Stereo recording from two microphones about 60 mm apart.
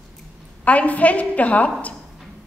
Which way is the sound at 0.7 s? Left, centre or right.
Left.